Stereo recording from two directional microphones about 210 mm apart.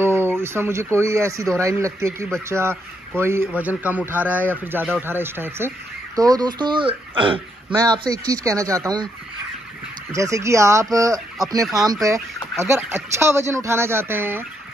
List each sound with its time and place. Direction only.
0.0 s a man's voice: 10° right (ahead or behind)
10.1 s a man's voice: 15° right (ahead or behind)